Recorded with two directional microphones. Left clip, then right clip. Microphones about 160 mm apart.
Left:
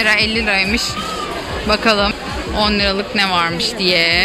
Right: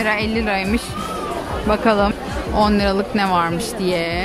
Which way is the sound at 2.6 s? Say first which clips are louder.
Left 1 dB; 35° right (ahead or behind).